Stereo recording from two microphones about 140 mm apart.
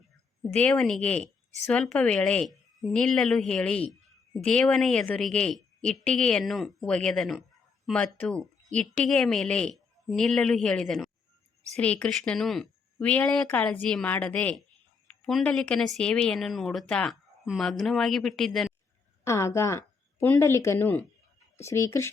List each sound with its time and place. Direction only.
0.5 s a woman's voice: 10° left (ahead or behind)
19.2 s speech: 20° left (ahead or behind)